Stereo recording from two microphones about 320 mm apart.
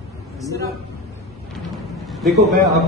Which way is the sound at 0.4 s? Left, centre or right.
Centre.